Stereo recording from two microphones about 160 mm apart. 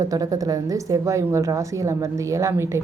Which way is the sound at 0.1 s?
20° right (ahead or behind).